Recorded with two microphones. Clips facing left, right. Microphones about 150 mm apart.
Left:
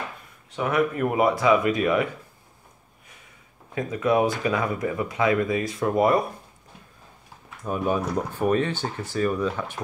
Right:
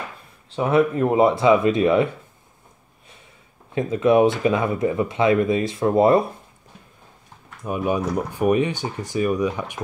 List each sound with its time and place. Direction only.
0.5 s speech: 30° right (ahead or behind)
3.7 s speech: 25° right (ahead or behind)
7.6 s speech: 10° right (ahead or behind)